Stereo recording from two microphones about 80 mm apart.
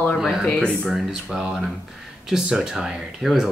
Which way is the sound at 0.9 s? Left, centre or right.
Centre.